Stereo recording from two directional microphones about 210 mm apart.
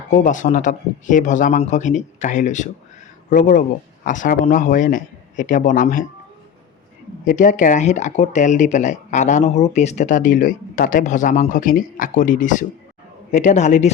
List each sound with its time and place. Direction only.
0.1 s speech: 35° left (ahead or behind)
7.3 s speech: 35° left (ahead or behind)